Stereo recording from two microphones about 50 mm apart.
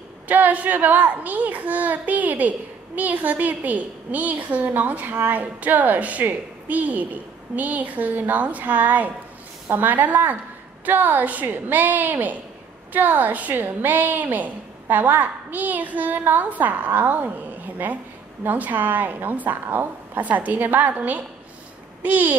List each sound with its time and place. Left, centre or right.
0.3 s a woman's voice: right